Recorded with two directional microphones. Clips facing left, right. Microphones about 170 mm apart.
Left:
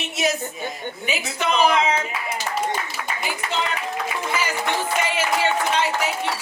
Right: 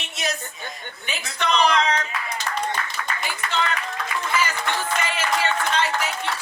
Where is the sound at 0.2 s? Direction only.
5° left (ahead or behind).